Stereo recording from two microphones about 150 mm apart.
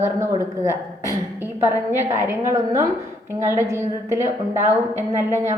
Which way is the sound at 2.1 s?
20° right (ahead or behind).